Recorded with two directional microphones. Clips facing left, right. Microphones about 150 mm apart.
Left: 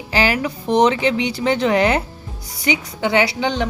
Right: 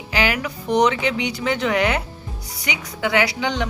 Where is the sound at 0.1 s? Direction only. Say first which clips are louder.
Left 3 dB; 35° left (ahead or behind).